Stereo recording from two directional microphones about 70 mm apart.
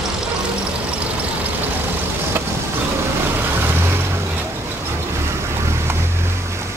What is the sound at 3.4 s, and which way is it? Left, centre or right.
Vehicle, right.